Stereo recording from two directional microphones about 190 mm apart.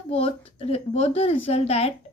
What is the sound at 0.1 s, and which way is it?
A woman's voice, 30° left (ahead or behind).